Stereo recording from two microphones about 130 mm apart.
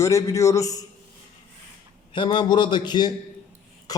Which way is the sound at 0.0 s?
25° left (ahead or behind).